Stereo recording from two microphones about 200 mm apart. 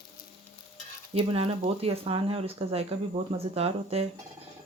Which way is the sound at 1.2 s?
30° right (ahead or behind).